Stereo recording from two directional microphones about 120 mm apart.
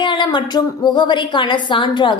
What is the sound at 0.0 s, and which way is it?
A woman's voice, 40° left (ahead or behind).